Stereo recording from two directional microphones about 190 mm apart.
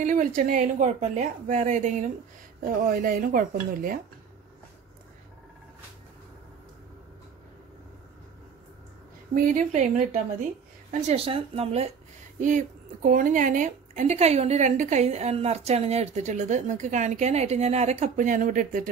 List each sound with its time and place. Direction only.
0.0 s a woman's voice: 40° right (ahead or behind)
9.3 s a woman's voice: 45° right (ahead or behind)